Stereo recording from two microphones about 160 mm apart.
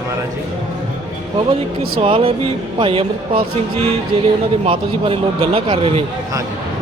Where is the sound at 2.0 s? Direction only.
35° right (ahead or behind).